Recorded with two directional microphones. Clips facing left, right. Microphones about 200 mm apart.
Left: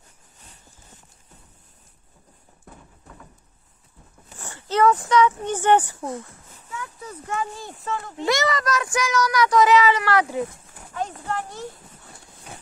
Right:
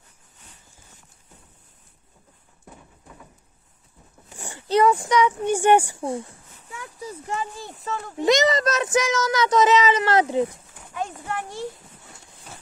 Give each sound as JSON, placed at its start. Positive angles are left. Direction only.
{"t": 4.4, "sound": "speech", "side_deg": -15}
{"t": 8.2, "sound": "a child's voice", "side_deg": -20}
{"t": 10.9, "sound": "a sound", "side_deg": -10}